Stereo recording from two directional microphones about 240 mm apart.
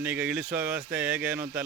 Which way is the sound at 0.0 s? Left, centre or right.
Centre.